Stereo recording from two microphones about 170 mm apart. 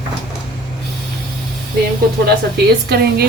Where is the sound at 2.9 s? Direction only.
75° right (ahead or behind).